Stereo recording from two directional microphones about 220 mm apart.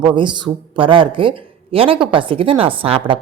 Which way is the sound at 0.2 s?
20° right (ahead or behind).